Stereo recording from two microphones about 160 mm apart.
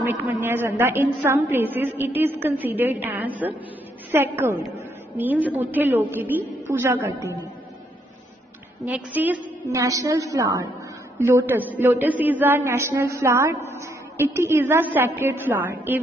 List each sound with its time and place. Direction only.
0.0 s a man's voice: 15° right (ahead or behind)
8.8 s a man's voice: 10° right (ahead or behind)